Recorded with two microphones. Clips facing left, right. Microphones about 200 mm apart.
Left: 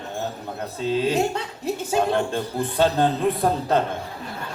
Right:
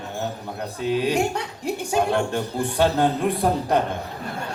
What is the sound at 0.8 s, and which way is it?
A man's voice, 15° right (ahead or behind).